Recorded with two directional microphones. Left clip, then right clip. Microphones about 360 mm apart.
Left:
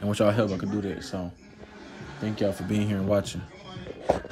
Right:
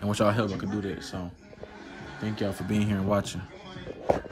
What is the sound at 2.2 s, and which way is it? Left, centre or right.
Speech, centre.